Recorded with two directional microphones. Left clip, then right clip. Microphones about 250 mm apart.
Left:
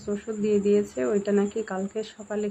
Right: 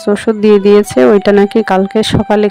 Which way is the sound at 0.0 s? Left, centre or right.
Right.